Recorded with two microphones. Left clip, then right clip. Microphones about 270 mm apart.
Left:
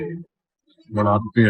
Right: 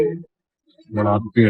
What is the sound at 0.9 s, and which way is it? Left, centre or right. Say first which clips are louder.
Speech: even; left.